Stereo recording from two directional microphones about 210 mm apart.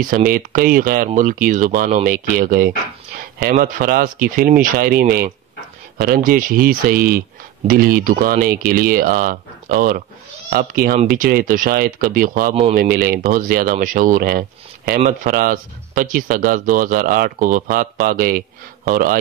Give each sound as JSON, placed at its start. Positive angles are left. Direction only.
{"t": 0.0, "sound": "speech", "side_deg": -40}